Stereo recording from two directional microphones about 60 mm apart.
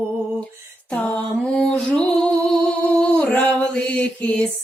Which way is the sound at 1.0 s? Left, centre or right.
Centre.